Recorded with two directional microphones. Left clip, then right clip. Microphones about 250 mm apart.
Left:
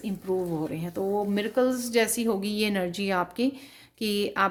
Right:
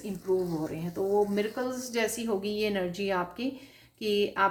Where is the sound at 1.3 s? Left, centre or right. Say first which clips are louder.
Left 6 dB; left.